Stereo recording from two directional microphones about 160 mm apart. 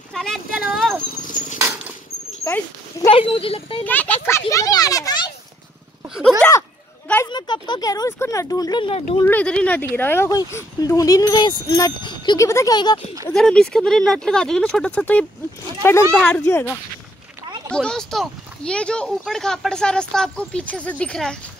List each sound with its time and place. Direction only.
0.1 s a sound: 5° left (ahead or behind)
1.2 s dog: 55° left (ahead or behind)
2.4 s speech: 15° left (ahead or behind)
3.1 s speech: 35° left (ahead or behind)
3.8 s speech: 10° left (ahead or behind); by 5.3 s 25° left (ahead or behind)
6.0 s a sound: 5° right (ahead or behind)
7.2 s speech: 30° left (ahead or behind)
9.2 s speech: 10° left (ahead or behind); by 13.0 s 25° left (ahead or behind)
13.3 s speech: 5° left (ahead or behind)
17.7 s speech: 5° left (ahead or behind)